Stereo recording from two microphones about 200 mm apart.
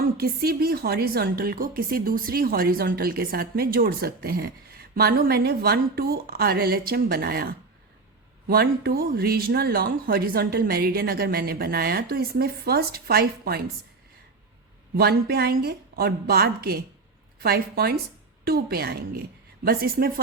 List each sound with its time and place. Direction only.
0.0 s a woman's voice: 50° right (ahead or behind)
14.9 s a woman's voice: 50° right (ahead or behind)